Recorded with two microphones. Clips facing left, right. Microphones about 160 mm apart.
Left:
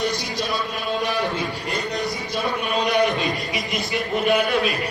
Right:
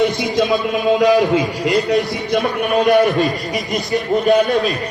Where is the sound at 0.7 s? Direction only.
90° right.